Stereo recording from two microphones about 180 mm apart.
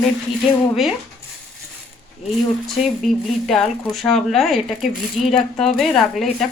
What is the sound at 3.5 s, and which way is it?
Speech, centre (ahead or behind).